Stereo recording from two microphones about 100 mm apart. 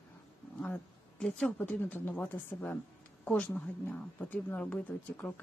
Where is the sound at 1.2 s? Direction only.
10° left (ahead or behind).